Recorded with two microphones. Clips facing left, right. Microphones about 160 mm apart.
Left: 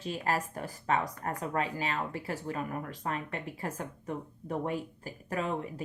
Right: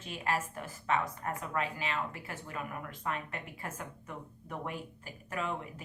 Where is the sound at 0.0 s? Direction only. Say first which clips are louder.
Left 3 dB; 35° left (ahead or behind).